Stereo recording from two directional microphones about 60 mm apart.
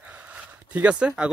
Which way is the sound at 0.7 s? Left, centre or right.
Centre.